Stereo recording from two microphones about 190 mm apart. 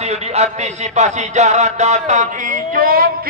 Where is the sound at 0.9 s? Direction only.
40° right (ahead or behind).